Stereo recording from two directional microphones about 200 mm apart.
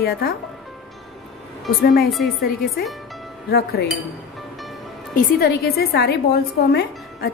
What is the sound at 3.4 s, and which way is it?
Speech, 50° left (ahead or behind).